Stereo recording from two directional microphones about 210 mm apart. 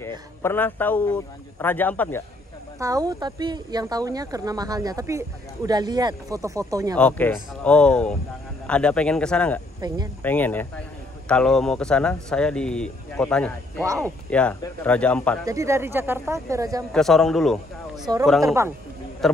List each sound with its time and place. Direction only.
0.4 s a man's voice: 10° left (ahead or behind)
2.8 s speech: 15° right (ahead or behind)
7.0 s a man's voice: 5° left (ahead or behind)
9.8 s speech: 20° right (ahead or behind)
10.2 s a man's voice: 10° left (ahead or behind)
15.4 s speech: 15° right (ahead or behind)
16.9 s speech: centre (ahead or behind)
18.4 s speech: 15° right (ahead or behind)
19.2 s a man's voice: centre (ahead or behind)